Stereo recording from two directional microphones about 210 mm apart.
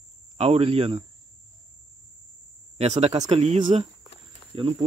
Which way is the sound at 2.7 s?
30° right (ahead or behind).